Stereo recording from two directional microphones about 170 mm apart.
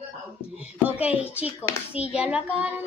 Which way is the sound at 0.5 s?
10° right (ahead or behind).